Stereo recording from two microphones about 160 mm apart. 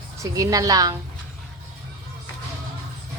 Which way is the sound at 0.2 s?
20° right (ahead or behind).